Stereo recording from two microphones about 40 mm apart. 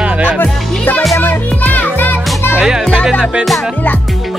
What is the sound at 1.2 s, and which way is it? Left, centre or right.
Music, left.